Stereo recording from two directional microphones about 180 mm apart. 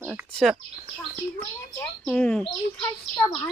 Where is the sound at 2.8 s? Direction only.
20° left (ahead or behind).